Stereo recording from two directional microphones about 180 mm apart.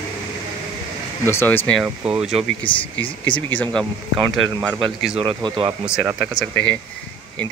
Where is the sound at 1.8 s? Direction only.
5° right (ahead or behind).